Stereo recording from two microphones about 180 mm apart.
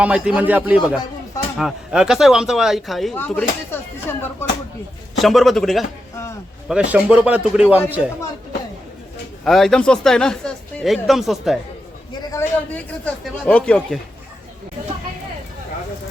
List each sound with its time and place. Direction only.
0.0 s a man's voice: 10° right (ahead or behind); by 4.2 s 10° left (ahead or behind)
5.1 s speech: centre (ahead or behind)
9.4 s speech: centre (ahead or behind)
12.2 s a man's voice: 15° left (ahead or behind)